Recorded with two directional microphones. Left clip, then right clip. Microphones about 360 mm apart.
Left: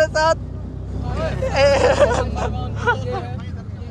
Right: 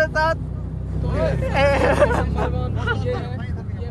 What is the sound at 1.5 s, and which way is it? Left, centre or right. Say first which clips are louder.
Speech: left 4 dB; centre.